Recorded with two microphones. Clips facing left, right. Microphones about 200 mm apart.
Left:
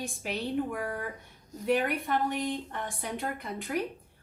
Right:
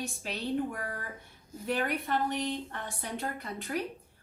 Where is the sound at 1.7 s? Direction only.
15° left (ahead or behind).